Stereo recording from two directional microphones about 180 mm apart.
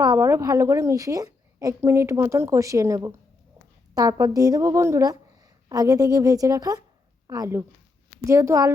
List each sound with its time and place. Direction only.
0.0 s a woman's voice: 20° right (ahead or behind)